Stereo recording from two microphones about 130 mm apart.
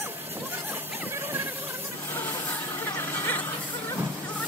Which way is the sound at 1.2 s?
20° right (ahead or behind).